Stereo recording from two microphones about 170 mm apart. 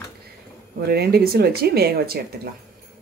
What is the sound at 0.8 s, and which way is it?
Speech, 70° right (ahead or behind).